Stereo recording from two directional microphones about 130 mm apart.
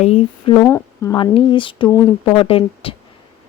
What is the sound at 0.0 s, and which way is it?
Speech, 50° left (ahead or behind).